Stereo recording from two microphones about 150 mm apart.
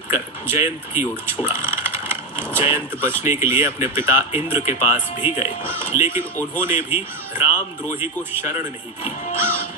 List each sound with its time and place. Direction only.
0.5 s speech: 15° right (ahead or behind)
1.5 s ratchet: 15° right (ahead or behind)
2.6 s speech: 15° right (ahead or behind)